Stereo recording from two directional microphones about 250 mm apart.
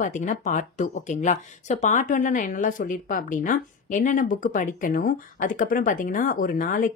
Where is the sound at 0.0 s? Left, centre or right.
Left.